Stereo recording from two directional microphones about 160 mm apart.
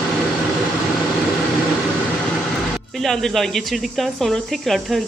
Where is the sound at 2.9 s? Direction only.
Centre (ahead or behind).